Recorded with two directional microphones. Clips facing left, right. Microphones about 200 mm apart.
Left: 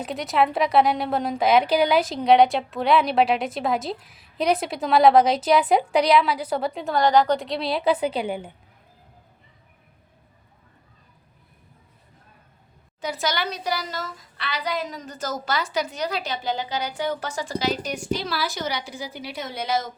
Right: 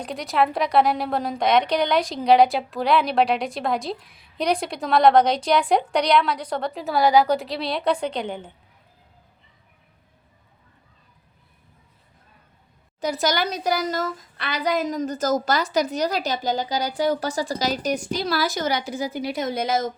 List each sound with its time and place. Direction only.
0.0 s a woman's voice: centre (ahead or behind)
13.0 s a woman's voice: 40° right (ahead or behind)